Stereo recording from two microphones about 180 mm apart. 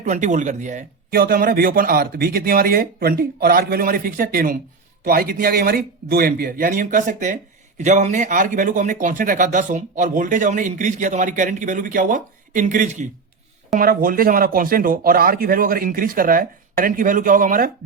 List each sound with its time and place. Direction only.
0.0 s a man's voice: 40° right (ahead or behind)